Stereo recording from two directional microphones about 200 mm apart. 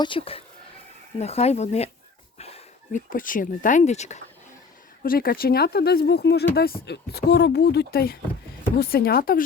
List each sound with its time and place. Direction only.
0.0 s speech: 25° left (ahead or behind)
2.4 s a sound: 30° left (ahead or behind)
3.1 s speech: 45° left (ahead or behind)
5.0 s speech: 45° left (ahead or behind)